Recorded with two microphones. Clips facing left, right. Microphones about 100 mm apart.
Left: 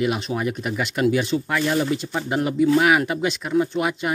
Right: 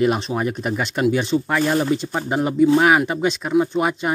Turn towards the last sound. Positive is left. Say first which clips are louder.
# right 3 dB
turn(degrees=-30)  # may be behind; listen again after turning